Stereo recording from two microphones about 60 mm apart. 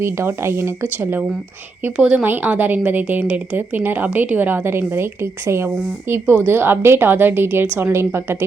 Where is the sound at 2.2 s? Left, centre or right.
Right.